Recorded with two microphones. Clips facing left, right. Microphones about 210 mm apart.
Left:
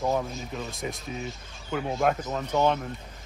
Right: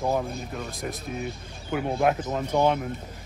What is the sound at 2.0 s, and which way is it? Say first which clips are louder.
Speech: right 2 dB; 10° right (ahead or behind).